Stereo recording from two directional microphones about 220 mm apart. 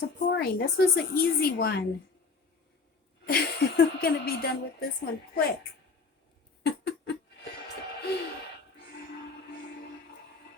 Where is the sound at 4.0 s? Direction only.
40° left (ahead or behind).